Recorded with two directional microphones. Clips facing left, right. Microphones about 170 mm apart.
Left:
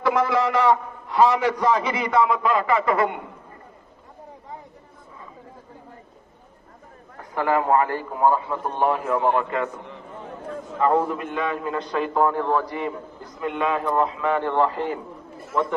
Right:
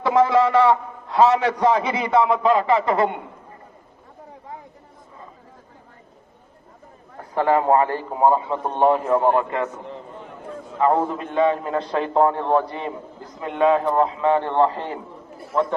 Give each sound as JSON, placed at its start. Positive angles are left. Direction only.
{"t": 0.0, "sound": "a man's voice", "side_deg": -25}
{"t": 7.3, "sound": "a man's voice", "side_deg": -30}
{"t": 11.1, "sound": "a man's voice", "side_deg": -30}